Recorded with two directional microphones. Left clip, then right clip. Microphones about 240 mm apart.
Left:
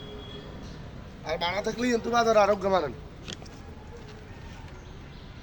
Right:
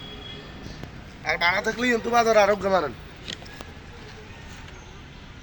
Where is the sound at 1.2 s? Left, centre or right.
Centre.